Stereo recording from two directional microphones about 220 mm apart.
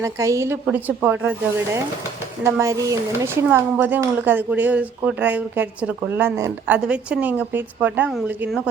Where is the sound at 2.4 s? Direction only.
15° right (ahead or behind).